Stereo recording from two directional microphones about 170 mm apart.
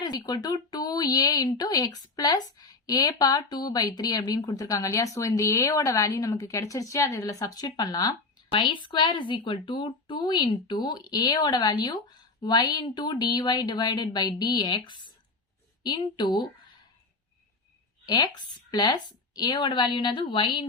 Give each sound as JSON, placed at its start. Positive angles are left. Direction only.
{"t": 0.0, "sound": "speech", "side_deg": 25}
{"t": 18.0, "sound": "speech", "side_deg": 25}